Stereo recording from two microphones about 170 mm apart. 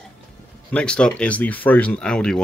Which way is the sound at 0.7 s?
5° left (ahead or behind).